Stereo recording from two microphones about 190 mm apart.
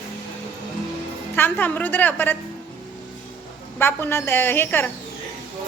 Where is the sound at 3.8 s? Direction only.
10° left (ahead or behind).